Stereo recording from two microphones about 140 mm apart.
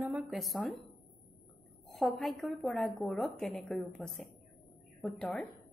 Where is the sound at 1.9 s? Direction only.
Centre (ahead or behind).